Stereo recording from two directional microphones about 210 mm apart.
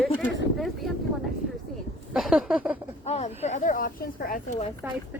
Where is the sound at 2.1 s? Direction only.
5° right (ahead or behind).